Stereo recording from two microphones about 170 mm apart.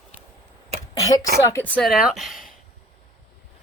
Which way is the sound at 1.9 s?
Centre (ahead or behind).